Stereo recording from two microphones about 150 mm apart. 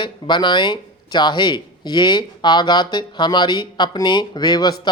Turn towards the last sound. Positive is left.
turn(degrees=25)  # may be behind; listen again after turning